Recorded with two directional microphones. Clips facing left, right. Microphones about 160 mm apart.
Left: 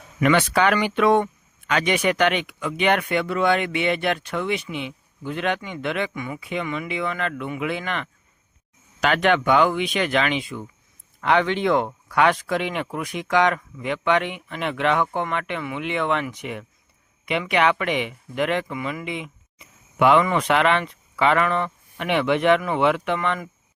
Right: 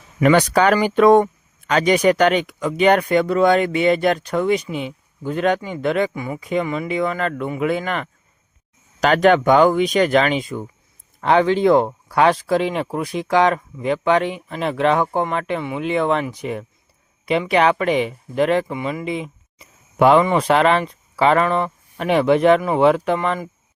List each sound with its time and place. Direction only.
0.2 s speech: 40° right (ahead or behind)